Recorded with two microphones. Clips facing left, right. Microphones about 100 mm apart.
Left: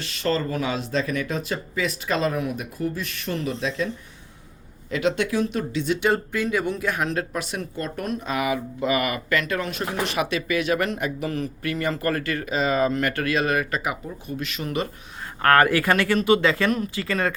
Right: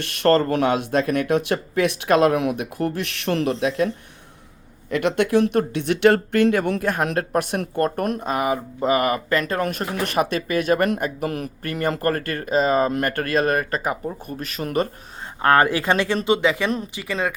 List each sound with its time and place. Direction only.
0.0 s speech: 60° right (ahead or behind)
4.9 s speech: 55° right (ahead or behind)
8.3 s speech: 40° right (ahead or behind)
15.4 s speech: 20° right (ahead or behind)